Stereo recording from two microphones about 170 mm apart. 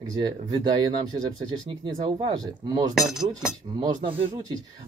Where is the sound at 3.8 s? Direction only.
30° right (ahead or behind).